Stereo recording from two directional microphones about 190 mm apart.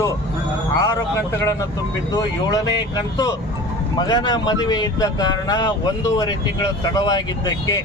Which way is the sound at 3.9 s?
20° left (ahead or behind).